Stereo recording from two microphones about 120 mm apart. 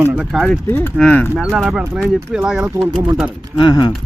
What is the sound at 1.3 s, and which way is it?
Speech, 15° right (ahead or behind).